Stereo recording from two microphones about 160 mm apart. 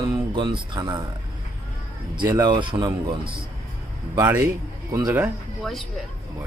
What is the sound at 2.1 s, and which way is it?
Speech, 25° right (ahead or behind).